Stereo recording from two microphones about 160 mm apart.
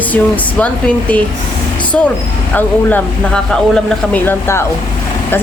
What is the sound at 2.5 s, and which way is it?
Speech, 10° left (ahead or behind).